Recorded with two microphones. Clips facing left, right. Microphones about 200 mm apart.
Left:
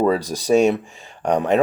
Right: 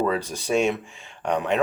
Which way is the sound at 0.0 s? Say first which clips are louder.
Left 5 dB; 35° left (ahead or behind).